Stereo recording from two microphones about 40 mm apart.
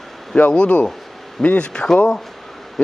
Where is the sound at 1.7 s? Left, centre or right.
Centre.